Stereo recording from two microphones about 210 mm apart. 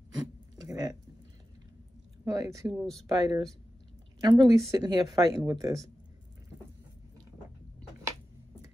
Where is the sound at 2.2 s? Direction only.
15° right (ahead or behind).